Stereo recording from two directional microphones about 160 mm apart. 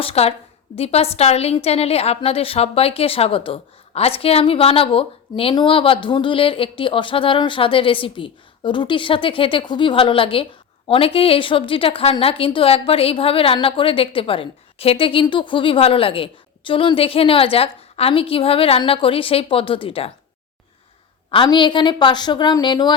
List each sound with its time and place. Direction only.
0.0 s a woman's voice: 40° left (ahead or behind)
21.2 s a woman's voice: 30° left (ahead or behind)